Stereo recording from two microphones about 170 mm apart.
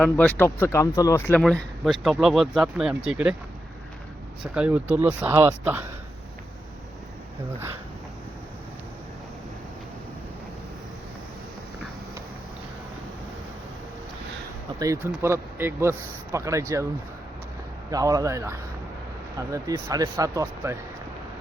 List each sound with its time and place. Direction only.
0.0 s speech: 10° left (ahead or behind)
4.5 s speech: 5° right (ahead or behind)
14.8 s speech: 15° right (ahead or behind)
17.9 s speech: 20° right (ahead or behind)